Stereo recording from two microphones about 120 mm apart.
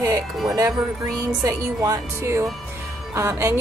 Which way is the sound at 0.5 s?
30° right (ahead or behind).